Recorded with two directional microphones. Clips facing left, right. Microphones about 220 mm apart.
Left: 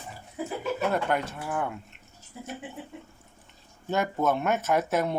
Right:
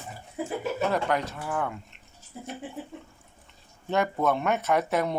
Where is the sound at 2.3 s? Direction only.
35° right (ahead or behind).